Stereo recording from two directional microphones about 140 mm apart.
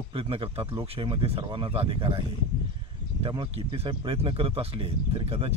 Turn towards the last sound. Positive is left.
turn(degrees=-45)  # may be behind; listen again after turning